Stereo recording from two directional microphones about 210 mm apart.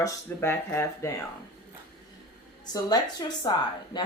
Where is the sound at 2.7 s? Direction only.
20° left (ahead or behind).